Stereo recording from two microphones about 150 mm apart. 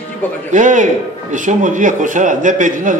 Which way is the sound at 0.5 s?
55° right (ahead or behind).